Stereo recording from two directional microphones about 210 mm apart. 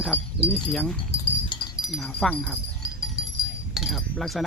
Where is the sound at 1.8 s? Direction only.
Centre (ahead or behind).